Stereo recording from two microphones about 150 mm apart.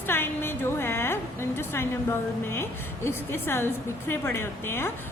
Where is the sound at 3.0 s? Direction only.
15° left (ahead or behind).